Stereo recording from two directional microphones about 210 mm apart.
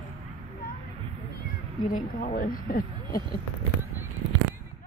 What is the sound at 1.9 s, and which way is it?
Speech, 40° left (ahead or behind).